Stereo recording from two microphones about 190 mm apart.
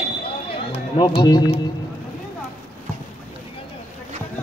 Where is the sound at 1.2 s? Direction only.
20° left (ahead or behind).